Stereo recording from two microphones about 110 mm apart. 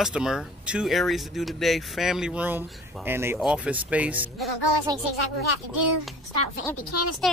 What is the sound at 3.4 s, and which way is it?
Speech, 10° right (ahead or behind).